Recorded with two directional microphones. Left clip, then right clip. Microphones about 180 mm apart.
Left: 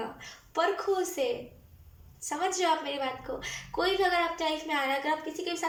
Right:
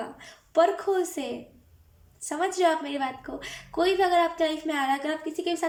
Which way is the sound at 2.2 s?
45° right (ahead or behind).